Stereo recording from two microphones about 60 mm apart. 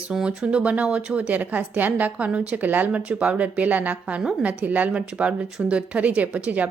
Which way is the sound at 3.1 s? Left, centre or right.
Centre.